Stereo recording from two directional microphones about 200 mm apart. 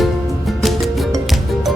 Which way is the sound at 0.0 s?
Centre (ahead or behind).